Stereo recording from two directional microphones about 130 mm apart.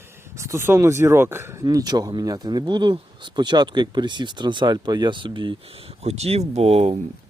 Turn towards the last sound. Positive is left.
turn(degrees=-55)  # may be behind; listen again after turning